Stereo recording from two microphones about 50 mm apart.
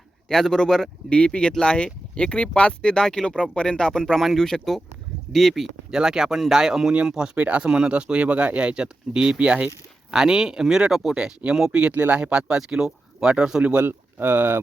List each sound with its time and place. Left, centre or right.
0.3 s speech: centre
1.1 s speech: left; by 5.6 s centre
5.9 s speech: centre
7.3 s speech: right
11.9 s speech: right
12.2 s speech: centre
13.8 s speech: right